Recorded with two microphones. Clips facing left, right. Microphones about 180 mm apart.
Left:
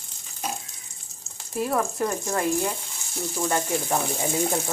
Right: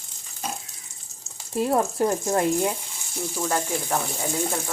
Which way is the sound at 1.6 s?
25° right (ahead or behind).